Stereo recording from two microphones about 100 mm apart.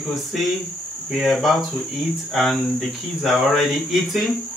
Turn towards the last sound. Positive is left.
turn(degrees=0)  # may be behind; listen again after turning